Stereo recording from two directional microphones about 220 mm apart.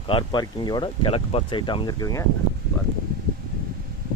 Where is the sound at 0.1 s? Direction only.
20° left (ahead or behind).